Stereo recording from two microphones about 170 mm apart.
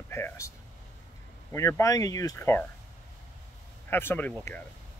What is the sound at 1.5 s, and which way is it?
Speech, 15° left (ahead or behind).